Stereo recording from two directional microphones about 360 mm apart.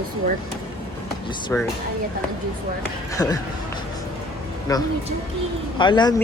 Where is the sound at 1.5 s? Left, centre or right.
Centre.